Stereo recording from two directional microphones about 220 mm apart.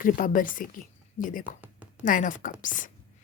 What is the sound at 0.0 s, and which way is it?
A woman's voice, 40° left (ahead or behind).